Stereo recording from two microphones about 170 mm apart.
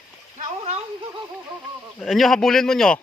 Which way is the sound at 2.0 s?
Centre (ahead or behind).